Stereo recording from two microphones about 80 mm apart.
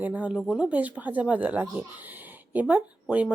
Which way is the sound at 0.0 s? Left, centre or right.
Centre.